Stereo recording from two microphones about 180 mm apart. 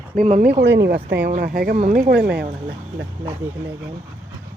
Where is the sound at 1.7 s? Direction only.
40° right (ahead or behind).